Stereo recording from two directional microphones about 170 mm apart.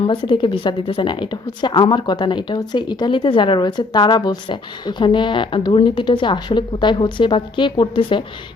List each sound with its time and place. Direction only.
0.1 s a woman's voice: 30° left (ahead or behind)